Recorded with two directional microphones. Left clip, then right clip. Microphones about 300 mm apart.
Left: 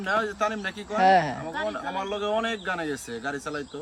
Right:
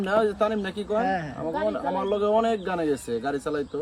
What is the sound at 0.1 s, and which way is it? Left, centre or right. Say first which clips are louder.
Speech: right 2 dB; centre.